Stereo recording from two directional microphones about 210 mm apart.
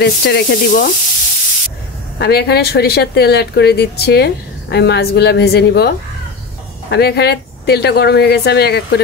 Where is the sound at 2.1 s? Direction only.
50° left (ahead or behind).